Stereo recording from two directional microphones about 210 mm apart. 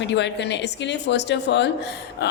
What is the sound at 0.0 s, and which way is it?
A woman's voice, 55° left (ahead or behind).